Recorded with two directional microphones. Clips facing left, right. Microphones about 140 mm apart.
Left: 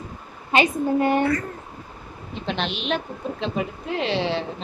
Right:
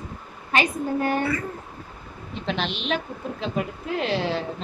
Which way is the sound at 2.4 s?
Centre (ahead or behind).